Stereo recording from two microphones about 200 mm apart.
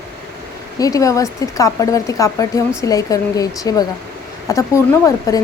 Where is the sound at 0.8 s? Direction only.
15° left (ahead or behind).